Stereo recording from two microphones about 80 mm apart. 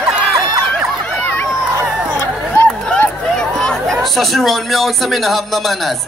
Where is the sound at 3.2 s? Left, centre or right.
Centre.